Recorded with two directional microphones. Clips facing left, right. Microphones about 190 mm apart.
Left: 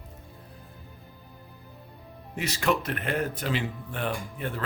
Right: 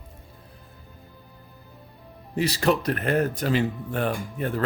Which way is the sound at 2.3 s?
35° right (ahead or behind).